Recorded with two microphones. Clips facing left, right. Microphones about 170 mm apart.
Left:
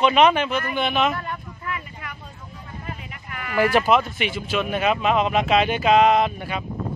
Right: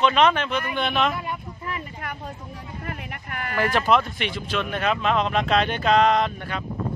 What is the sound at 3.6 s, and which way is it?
Speech, 5° left (ahead or behind).